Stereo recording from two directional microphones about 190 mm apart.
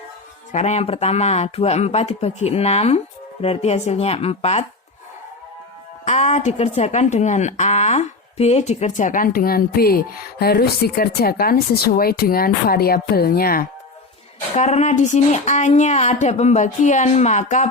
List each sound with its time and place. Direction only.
0.5 s speech: 35° left (ahead or behind)
6.1 s a woman's voice: 35° left (ahead or behind)
14.5 s speech: 35° left (ahead or behind)